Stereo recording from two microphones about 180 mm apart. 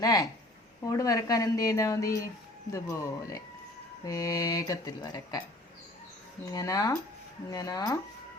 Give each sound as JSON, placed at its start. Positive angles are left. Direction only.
{"t": 0.0, "sound": "speech", "side_deg": 20}
{"t": 6.4, "sound": "speech", "side_deg": 20}